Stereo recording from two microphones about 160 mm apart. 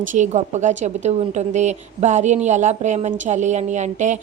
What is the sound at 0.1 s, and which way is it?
A woman's voice, 50° right (ahead or behind).